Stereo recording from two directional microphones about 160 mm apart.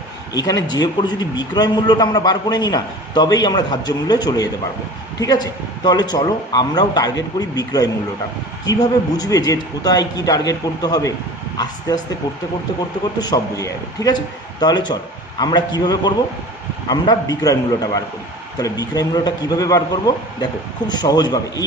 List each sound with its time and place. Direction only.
0.3 s a man's voice: 25° left (ahead or behind)
13.1 s a man's voice: 25° left (ahead or behind)